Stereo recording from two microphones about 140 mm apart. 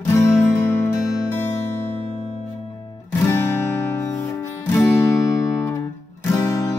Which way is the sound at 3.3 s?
20° left (ahead or behind).